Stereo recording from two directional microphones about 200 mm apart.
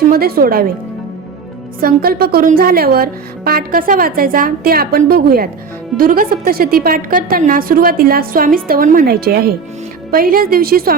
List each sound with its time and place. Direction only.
0.1 s speech: 50° right (ahead or behind)
1.8 s speech: 50° right (ahead or behind)